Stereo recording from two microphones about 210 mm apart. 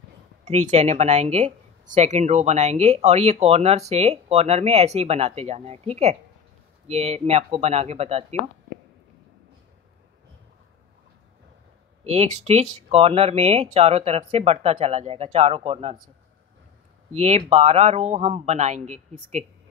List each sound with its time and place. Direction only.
0.5 s speech: 30° right (ahead or behind)
12.0 s speech: 30° right (ahead or behind)
17.1 s speech: 30° right (ahead or behind)